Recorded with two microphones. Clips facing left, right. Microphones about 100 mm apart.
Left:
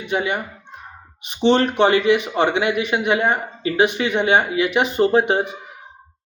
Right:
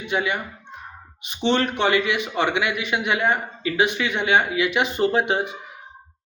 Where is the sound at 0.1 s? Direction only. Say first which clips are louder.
Left 2 dB; 40° left (ahead or behind).